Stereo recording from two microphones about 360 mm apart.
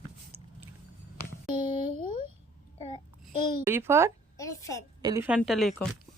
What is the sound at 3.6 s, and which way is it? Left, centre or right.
Speech, centre.